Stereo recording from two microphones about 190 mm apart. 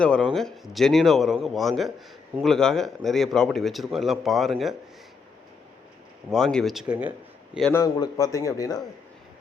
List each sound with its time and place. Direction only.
0.0 s a man's voice: 5° left (ahead or behind)
6.3 s a man's voice: centre (ahead or behind)
7.7 s a man's voice: 20° left (ahead or behind)